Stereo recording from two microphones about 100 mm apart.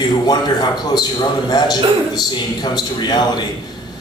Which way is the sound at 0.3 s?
45° left (ahead or behind).